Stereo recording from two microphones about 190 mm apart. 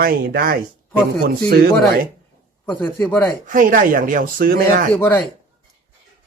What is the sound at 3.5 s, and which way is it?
Speech, 45° right (ahead or behind).